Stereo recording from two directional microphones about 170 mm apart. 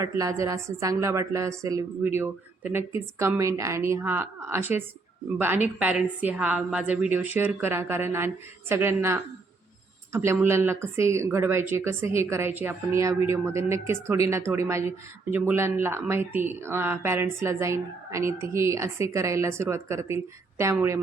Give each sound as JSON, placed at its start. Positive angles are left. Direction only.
{"t": 0.0, "sound": "a woman's voice", "side_deg": -20}